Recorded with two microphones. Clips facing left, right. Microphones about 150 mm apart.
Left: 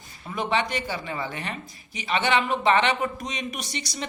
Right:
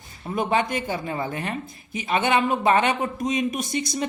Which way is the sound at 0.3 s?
45° right (ahead or behind).